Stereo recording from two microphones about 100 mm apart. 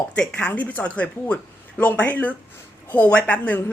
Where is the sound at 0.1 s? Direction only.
10° left (ahead or behind).